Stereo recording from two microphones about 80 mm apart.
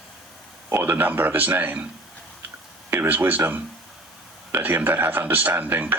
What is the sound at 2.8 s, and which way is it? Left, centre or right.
Speech, right.